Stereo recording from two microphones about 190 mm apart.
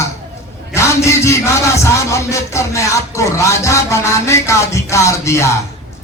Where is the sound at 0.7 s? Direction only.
15° left (ahead or behind).